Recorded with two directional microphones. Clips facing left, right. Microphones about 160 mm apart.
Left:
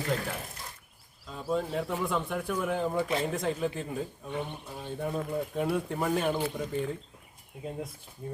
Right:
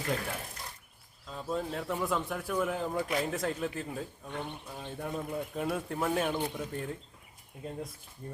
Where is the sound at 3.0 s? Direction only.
25° left (ahead or behind).